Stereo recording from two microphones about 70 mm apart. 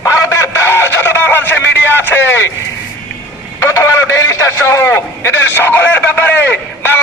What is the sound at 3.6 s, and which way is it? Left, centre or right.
A man's voice, left.